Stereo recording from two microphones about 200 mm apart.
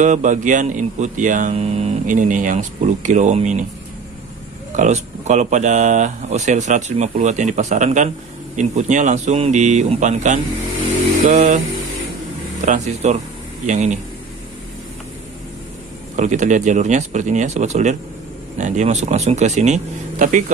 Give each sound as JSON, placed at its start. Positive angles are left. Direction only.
{"t": 0.0, "sound": "speech", "side_deg": -40}
{"t": 4.7, "sound": "speech", "side_deg": -35}
{"t": 12.6, "sound": "speech", "side_deg": -35}
{"t": 16.2, "sound": "speech", "side_deg": -35}